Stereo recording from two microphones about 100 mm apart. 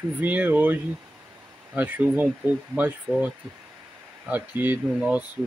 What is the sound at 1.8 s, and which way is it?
Speech, 15° right (ahead or behind).